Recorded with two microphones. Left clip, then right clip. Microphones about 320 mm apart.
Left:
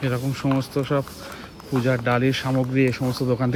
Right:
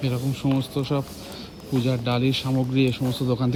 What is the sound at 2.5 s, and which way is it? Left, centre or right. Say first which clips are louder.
Speech: left 2 dB; centre.